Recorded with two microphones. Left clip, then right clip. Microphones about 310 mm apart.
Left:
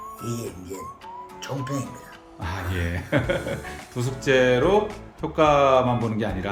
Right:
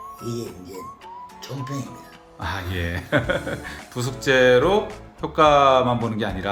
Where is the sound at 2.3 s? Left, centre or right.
Centre.